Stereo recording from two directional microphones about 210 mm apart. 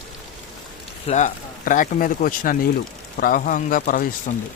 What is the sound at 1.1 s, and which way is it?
Speech, 35° left (ahead or behind).